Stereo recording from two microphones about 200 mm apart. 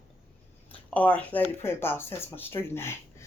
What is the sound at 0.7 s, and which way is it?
Speech, 5° left (ahead or behind).